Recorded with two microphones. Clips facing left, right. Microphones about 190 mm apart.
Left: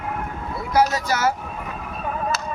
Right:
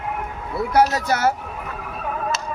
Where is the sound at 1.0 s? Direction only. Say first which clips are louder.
Right 2 dB; 60° right (ahead or behind).